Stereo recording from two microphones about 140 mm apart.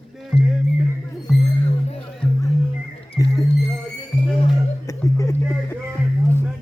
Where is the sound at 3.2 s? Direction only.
20° left (ahead or behind).